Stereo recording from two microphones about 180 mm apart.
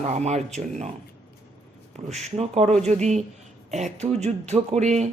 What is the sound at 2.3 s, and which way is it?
Speech, 35° right (ahead or behind).